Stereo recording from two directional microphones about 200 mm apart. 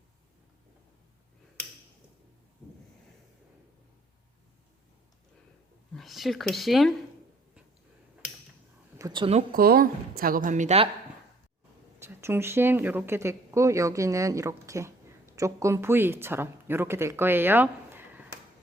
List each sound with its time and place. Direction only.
5.9 s speech: centre (ahead or behind)
9.0 s speech: 20° right (ahead or behind)
9.5 s speech: 50° right (ahead or behind)
11.9 s speech: 10° right (ahead or behind)